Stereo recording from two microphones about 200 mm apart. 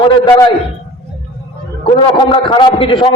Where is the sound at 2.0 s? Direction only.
25° left (ahead or behind).